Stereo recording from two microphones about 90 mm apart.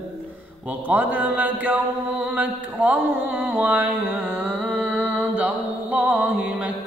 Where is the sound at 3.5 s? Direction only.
20° right (ahead or behind).